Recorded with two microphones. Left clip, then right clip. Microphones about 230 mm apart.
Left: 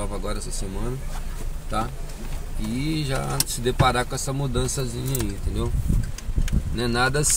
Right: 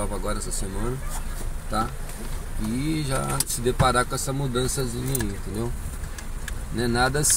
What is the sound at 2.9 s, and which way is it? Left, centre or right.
Speech, centre.